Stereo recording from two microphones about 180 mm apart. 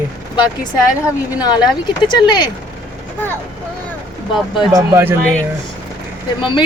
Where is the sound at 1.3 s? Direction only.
20° left (ahead or behind).